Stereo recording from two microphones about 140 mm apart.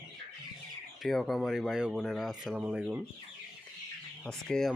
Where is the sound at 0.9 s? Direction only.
Centre (ahead or behind).